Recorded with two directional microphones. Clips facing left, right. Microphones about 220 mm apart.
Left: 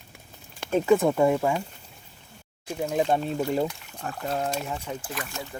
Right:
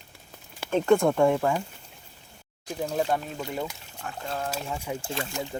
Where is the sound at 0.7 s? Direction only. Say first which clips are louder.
Even; centre (ahead or behind).